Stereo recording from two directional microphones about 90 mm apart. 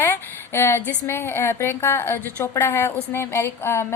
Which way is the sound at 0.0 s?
25° left (ahead or behind).